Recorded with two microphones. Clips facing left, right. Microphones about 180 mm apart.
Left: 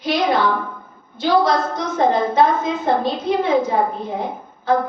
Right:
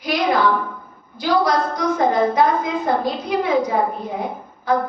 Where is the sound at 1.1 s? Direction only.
25° left (ahead or behind).